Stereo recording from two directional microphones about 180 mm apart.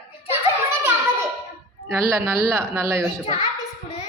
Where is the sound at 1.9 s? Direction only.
15° right (ahead or behind).